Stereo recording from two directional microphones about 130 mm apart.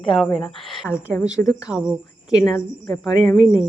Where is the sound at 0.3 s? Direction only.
Centre (ahead or behind).